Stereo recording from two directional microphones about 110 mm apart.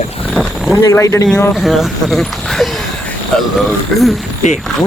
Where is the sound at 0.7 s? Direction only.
25° left (ahead or behind).